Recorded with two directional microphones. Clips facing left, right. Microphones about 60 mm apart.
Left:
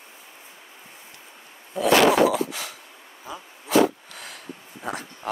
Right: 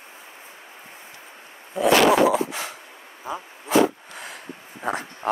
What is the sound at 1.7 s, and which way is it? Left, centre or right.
Dog, right.